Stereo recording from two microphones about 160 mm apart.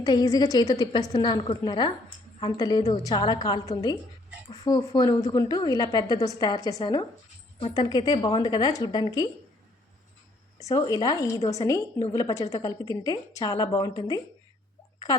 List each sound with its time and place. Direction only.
0.0 s a woman's voice: 25° left (ahead or behind)
10.7 s a woman's voice: 20° left (ahead or behind)